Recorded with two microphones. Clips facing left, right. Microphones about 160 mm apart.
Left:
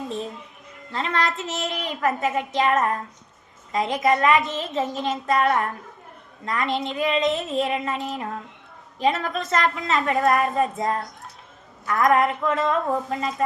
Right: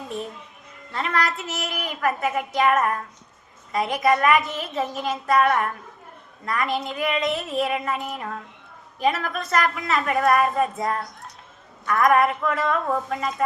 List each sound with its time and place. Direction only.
0.9 s a woman's voice: 20° left (ahead or behind)